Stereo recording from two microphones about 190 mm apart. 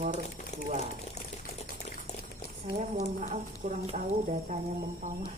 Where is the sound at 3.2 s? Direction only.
35° right (ahead or behind).